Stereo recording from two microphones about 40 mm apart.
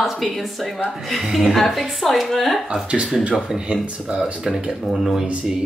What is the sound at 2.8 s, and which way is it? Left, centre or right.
Speech, right.